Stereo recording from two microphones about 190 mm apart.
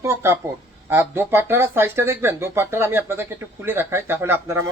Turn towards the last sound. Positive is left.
turn(degrees=-10)  # may be behind; listen again after turning